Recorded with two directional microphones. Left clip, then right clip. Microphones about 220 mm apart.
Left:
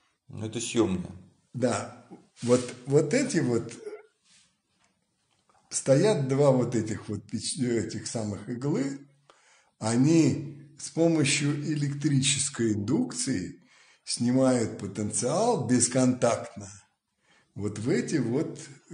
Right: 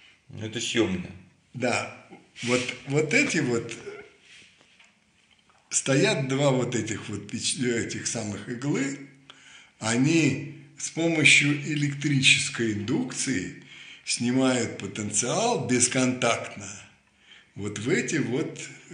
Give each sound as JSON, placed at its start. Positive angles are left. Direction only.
{"t": 0.3, "sound": "speech", "side_deg": 5}
{"t": 2.4, "sound": "speech", "side_deg": 90}
{"t": 5.7, "sound": "speech", "side_deg": 75}
{"t": 12.0, "sound": "a man's voice", "side_deg": 90}